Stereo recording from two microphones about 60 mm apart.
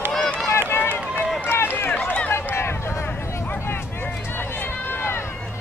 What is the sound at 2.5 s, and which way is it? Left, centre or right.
Vehicle, left.